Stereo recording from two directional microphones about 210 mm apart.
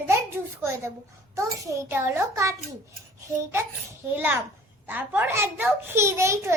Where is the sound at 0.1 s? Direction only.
10° right (ahead or behind).